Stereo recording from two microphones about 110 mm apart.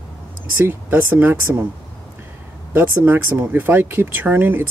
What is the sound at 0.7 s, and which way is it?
Speech, 15° right (ahead or behind).